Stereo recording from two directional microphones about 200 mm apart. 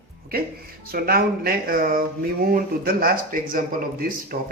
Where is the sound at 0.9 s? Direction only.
50° right (ahead or behind).